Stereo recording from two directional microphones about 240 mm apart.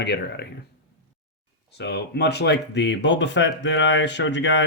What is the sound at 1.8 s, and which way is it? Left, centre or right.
Speech, left.